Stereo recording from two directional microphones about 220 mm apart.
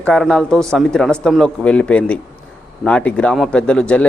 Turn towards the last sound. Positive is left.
turn(degrees=5)  # may be behind; listen again after turning